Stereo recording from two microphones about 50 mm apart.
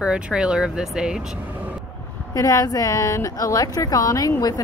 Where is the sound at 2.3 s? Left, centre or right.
Left.